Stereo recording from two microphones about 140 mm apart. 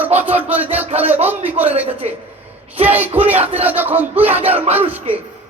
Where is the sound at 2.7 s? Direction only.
15° right (ahead or behind).